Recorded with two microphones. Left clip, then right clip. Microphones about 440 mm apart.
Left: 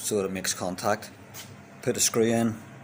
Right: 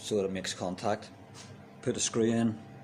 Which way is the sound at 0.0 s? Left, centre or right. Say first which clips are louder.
Left 3 dB; right.